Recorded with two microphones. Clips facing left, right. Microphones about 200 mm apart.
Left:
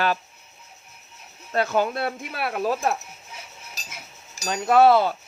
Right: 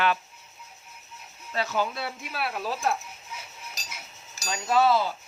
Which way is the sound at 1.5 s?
55° left (ahead or behind).